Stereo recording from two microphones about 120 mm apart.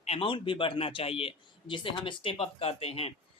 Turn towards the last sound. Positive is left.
turn(degrees=55)  # may be behind; listen again after turning